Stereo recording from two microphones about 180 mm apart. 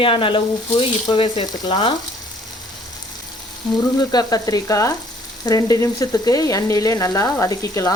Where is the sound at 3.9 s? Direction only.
20° left (ahead or behind).